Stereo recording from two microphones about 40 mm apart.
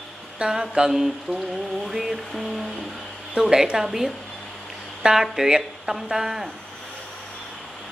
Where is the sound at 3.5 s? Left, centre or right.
Centre.